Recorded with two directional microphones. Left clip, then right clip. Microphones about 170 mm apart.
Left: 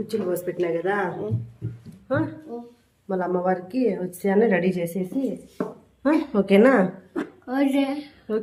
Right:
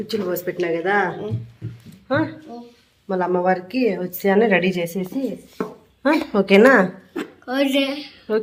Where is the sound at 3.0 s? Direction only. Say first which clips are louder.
Right 4 dB; 20° right (ahead or behind).